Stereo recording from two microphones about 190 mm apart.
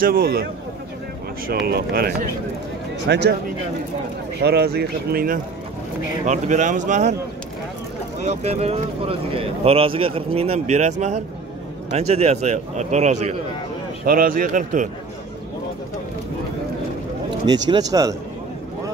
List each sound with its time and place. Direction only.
0.0 s a man's voice: 50° right (ahead or behind)
1.7 s speech: 55° right (ahead or behind)
4.4 s speech: 55° right (ahead or behind)
6.2 s speech: 40° right (ahead or behind)
8.2 s speech: 35° right (ahead or behind)
14.0 s a man's voice: 50° right (ahead or behind)
17.5 s speech: 20° right (ahead or behind)